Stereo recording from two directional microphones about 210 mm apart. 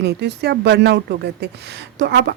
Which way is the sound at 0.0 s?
50° right (ahead or behind).